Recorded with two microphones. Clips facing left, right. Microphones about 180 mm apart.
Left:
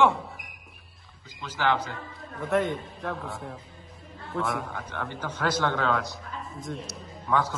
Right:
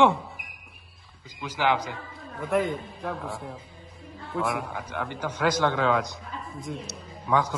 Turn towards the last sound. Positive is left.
turn(degrees=-15)  # may be behind; listen again after turning